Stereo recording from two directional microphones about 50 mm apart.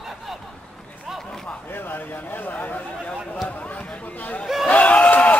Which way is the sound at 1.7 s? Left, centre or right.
Left.